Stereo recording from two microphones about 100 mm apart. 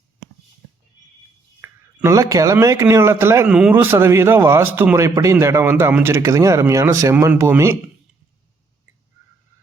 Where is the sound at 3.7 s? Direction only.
20° right (ahead or behind).